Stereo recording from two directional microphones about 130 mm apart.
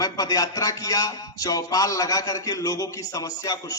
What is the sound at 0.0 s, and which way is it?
A man's voice, 30° left (ahead or behind).